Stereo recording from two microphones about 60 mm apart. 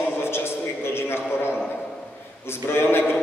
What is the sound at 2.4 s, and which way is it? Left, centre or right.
Speech, left.